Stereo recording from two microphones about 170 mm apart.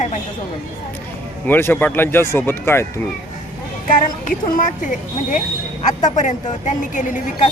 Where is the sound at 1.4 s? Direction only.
10° left (ahead or behind).